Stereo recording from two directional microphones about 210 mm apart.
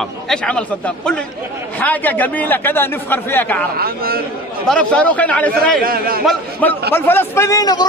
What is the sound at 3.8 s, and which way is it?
Speech, 45° right (ahead or behind).